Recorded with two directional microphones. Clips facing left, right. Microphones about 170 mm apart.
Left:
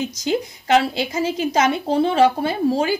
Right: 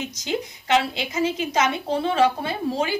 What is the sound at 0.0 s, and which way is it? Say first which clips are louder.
A woman's voice: left 5 dB; 35° left (ahead or behind).